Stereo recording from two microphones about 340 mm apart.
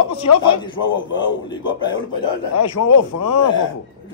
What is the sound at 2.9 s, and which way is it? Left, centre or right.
Speech, left.